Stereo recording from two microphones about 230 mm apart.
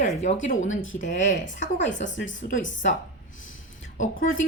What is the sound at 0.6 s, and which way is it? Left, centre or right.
Speech, left.